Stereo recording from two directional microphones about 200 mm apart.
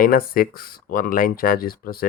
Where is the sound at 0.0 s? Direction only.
45° left (ahead or behind).